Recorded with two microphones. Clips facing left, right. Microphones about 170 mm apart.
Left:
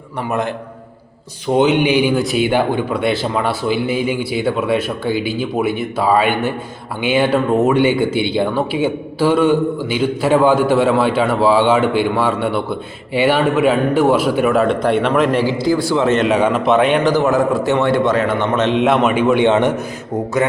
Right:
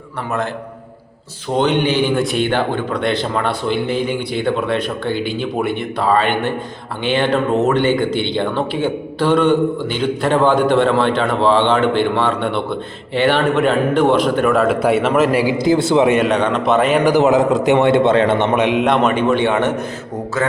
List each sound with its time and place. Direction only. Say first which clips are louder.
0.3 s speech: left 2 dB; 15° left (ahead or behind)
1.5 s a man's voice: left 2 dB; 10° left (ahead or behind); by 16.2 s 15° right (ahead or behind)
16.2 s a man's voice: left 1 dB; 5° left (ahead or behind); by 18.8 s 15° right (ahead or behind)
18.8 s a man's voice: left 1 dB; centre (ahead or behind)